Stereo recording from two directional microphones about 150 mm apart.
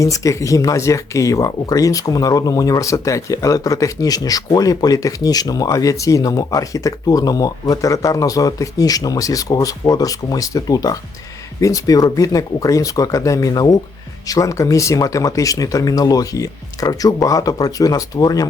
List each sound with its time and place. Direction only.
0.0 s speech: 20° left (ahead or behind)